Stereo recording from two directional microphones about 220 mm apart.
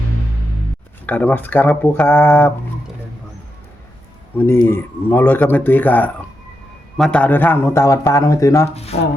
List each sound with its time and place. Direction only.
1.0 s a man's voice: 5° left (ahead or behind)
4.4 s a man's voice: 10° left (ahead or behind)
8.7 s speech: 30° left (ahead or behind)